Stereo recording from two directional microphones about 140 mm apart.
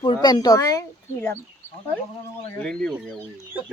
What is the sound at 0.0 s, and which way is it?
Speech, 35° left (ahead or behind).